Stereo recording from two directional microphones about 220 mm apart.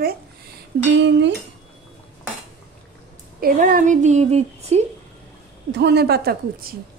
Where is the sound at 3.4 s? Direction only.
40° right (ahead or behind).